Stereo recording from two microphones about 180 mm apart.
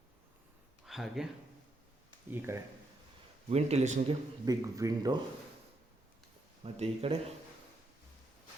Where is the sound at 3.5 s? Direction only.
35° right (ahead or behind).